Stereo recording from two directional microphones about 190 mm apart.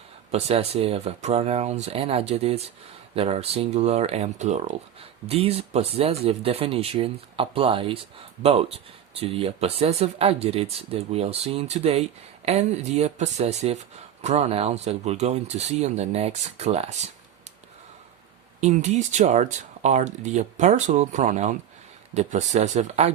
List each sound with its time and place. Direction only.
0.3 s speech: 35° right (ahead or behind)
18.6 s speech: 35° right (ahead or behind)